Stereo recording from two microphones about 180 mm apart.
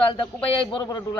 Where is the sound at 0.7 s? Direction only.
25° left (ahead or behind).